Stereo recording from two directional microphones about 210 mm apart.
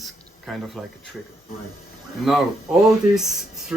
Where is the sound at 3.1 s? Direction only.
Centre (ahead or behind).